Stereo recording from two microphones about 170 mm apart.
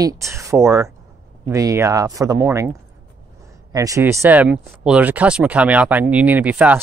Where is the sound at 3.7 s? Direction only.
20° right (ahead or behind).